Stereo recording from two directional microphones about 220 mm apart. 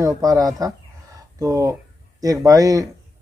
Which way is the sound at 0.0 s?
15° right (ahead or behind).